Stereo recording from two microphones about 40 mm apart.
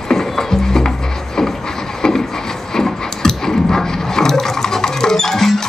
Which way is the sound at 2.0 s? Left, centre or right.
Centre.